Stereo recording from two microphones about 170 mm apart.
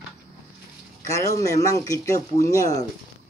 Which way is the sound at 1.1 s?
20° left (ahead or behind).